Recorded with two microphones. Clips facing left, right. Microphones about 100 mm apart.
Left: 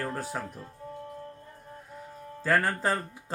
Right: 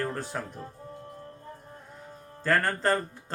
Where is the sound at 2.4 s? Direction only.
5° left (ahead or behind).